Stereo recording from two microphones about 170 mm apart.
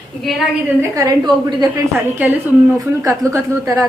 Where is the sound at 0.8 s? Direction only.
20° right (ahead or behind).